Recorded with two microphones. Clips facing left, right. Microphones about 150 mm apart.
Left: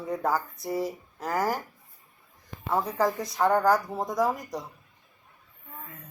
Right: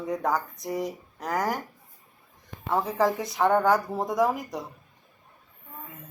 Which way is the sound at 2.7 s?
Centre (ahead or behind).